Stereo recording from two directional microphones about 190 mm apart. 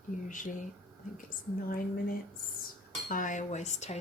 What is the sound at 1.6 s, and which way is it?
Speech, 50° left (ahead or behind).